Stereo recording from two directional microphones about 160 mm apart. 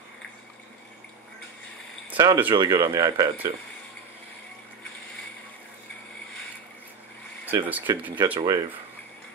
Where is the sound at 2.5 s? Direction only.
30° right (ahead or behind).